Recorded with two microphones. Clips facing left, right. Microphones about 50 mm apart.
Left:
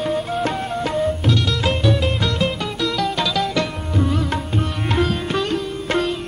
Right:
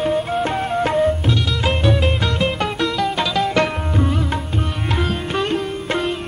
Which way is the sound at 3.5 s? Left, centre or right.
Right.